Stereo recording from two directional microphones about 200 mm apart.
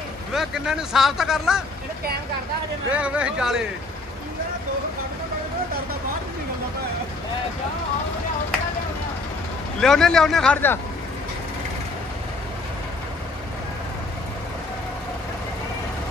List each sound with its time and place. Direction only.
0.3 s speech: 5° right (ahead or behind)
2.9 s speech: 5° right (ahead or behind)
9.8 s speech: centre (ahead or behind)